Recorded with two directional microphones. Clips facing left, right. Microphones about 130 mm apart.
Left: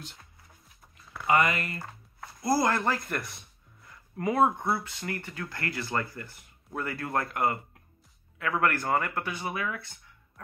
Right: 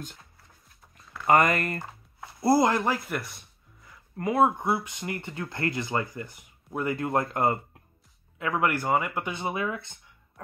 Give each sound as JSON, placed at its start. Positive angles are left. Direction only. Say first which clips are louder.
{"t": 1.2, "sound": "speech", "louder": "right 4 dB", "side_deg": -45}
{"t": 2.4, "sound": "a man's voice", "louder": "right 4 dB", "side_deg": -20}
{"t": 4.6, "sound": "speech", "louder": "right 2 dB", "side_deg": -15}
{"t": 9.2, "sound": "speech", "louder": "right 3 dB", "side_deg": -25}